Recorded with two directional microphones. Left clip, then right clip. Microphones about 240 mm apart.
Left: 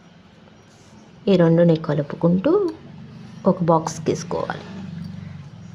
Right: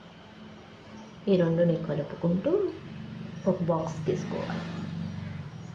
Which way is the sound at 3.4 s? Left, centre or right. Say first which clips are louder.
Left 9 dB; left.